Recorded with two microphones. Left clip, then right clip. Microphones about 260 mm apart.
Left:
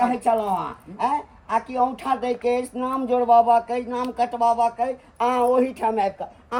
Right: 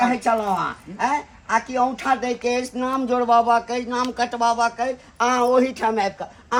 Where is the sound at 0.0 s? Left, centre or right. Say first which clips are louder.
Right 1 dB; right.